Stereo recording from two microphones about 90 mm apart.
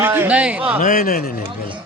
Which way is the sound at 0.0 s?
25° right (ahead or behind).